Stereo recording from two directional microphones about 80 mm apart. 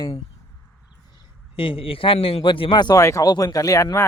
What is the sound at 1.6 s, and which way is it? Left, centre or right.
A man's voice, left.